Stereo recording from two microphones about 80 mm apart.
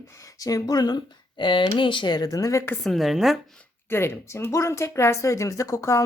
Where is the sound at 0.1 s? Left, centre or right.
Left.